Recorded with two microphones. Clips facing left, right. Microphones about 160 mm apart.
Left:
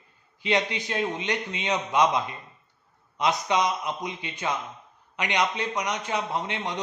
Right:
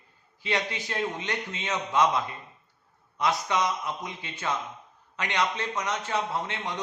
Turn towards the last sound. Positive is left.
turn(degrees=20)  # may be behind; listen again after turning